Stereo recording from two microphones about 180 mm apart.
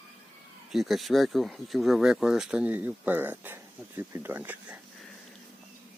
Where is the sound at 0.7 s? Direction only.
Centre (ahead or behind).